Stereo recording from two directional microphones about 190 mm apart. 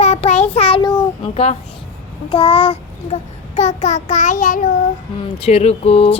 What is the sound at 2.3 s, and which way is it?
A child's voice, 30° left (ahead or behind).